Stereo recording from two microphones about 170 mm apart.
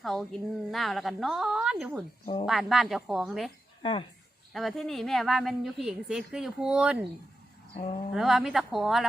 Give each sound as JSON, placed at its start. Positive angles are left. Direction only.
{"t": 0.0, "sound": "a woman's voice", "side_deg": 0}
{"t": 2.2, "sound": "speech", "side_deg": 35}
{"t": 2.5, "sound": "a woman's voice", "side_deg": 0}
{"t": 4.5, "sound": "a woman's voice", "side_deg": 0}
{"t": 8.1, "sound": "a woman's voice", "side_deg": 0}